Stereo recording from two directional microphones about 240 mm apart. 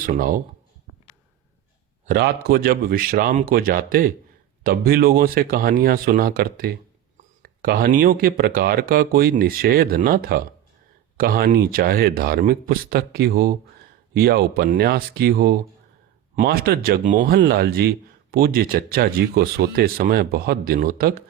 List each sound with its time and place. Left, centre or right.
0.0 s speech: right
2.0 s speech: right